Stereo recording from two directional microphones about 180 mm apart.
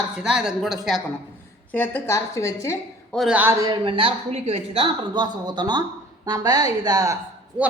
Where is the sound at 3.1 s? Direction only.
5° right (ahead or behind).